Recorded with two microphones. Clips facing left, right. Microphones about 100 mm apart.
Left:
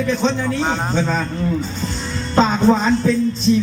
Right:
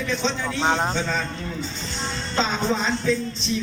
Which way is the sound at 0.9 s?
45° left (ahead or behind).